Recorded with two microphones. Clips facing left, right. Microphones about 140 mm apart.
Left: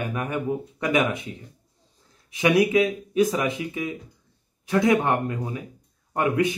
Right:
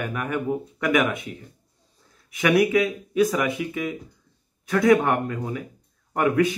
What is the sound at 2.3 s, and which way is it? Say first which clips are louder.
Speech: even; 25° left (ahead or behind).